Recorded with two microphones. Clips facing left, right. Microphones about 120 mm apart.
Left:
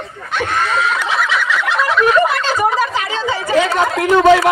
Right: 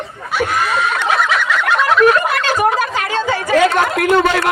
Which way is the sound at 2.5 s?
60° right (ahead or behind).